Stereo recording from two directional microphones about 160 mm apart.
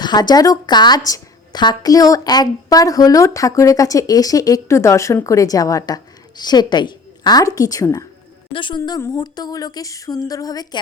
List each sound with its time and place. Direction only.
0.0 s a woman's voice: 25° left (ahead or behind)